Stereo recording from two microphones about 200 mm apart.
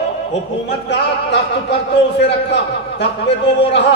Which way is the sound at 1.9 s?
60° left (ahead or behind).